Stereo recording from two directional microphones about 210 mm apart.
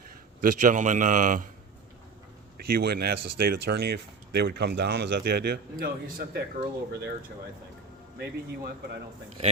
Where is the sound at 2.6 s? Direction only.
45° right (ahead or behind).